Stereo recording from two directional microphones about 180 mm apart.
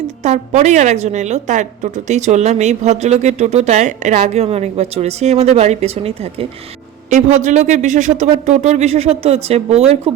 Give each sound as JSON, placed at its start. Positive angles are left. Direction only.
{"t": 0.2, "sound": "a woman's voice", "side_deg": -40}